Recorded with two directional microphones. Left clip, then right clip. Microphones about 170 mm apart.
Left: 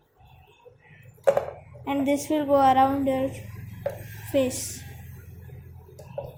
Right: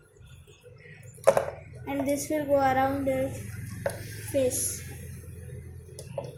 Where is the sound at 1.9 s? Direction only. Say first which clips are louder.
Left 4 dB; 45° left (ahead or behind).